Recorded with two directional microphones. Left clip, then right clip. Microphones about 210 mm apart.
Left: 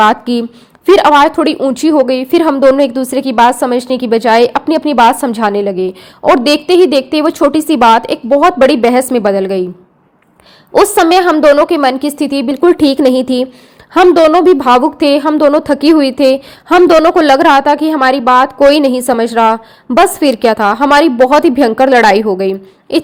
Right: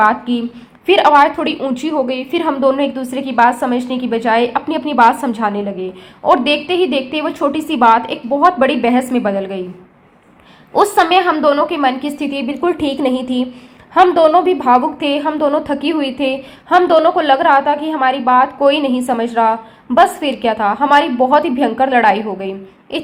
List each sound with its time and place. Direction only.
0.0 s a woman's voice: 50° left (ahead or behind)
10.8 s a woman's voice: 45° left (ahead or behind)